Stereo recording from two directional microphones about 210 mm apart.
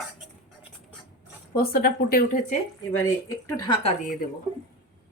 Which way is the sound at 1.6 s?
45° left (ahead or behind).